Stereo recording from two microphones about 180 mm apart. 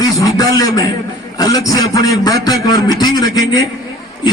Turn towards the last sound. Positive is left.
turn(degrees=20)  # may be behind; listen again after turning